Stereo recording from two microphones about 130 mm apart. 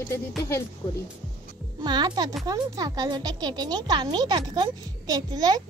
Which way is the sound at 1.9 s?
35° right (ahead or behind).